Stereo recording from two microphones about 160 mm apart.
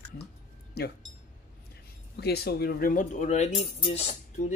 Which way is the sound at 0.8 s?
80° left.